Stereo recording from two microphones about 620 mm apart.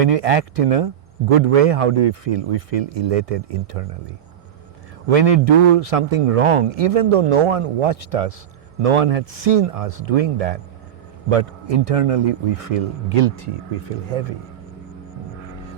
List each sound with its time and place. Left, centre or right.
0.0 s a man's voice: right
5.0 s a man's voice: right